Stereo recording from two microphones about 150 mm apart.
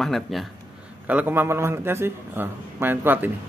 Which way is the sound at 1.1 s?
10° right (ahead or behind).